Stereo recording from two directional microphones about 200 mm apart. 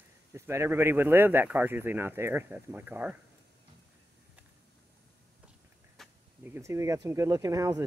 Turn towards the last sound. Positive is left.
turn(degrees=-15)  # may be behind; listen again after turning